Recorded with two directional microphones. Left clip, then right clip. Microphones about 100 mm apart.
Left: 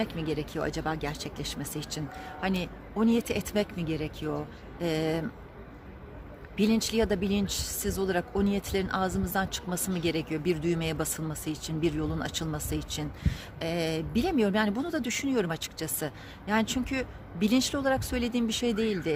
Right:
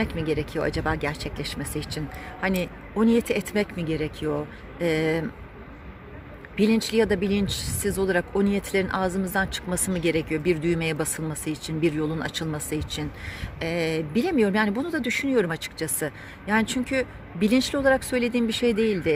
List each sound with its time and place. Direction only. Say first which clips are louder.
0.0 s speech: right 5 dB; 5° left (ahead or behind)
4.2 s speech: right 6 dB; 5° left (ahead or behind)
4.8 s speech: right 6 dB; 15° left (ahead or behind)
6.6 s speech: right 5 dB; 20° left (ahead or behind)